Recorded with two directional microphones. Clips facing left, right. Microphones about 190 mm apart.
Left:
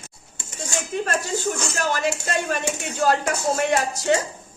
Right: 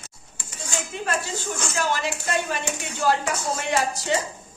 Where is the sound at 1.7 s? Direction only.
45° left (ahead or behind).